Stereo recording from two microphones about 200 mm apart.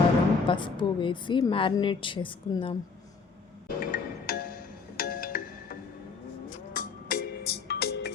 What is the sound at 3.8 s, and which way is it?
Music, 45° left (ahead or behind).